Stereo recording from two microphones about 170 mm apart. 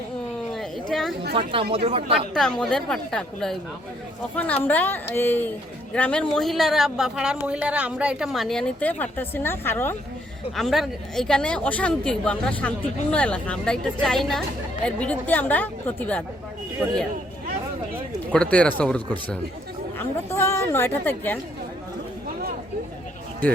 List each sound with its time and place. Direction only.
0.5 s a sound: centre (ahead or behind)
1.3 s speech: 30° right (ahead or behind)
2.1 s a woman's voice: 5° left (ahead or behind)
10.5 s a woman's voice: centre (ahead or behind)
18.3 s a woman's voice: 5° left (ahead or behind)
23.4 s a woman's voice: 10° left (ahead or behind)